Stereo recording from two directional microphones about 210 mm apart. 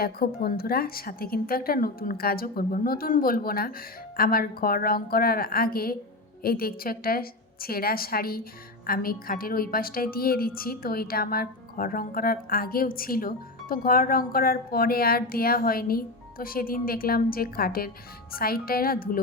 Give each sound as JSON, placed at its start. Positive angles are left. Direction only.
{"t": 0.0, "sound": "a woman's voice", "side_deg": 45}